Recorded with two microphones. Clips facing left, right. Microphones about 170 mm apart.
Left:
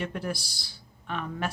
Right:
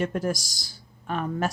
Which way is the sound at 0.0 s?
45° right (ahead or behind).